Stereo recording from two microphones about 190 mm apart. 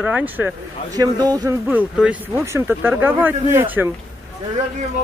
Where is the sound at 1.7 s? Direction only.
5° right (ahead or behind).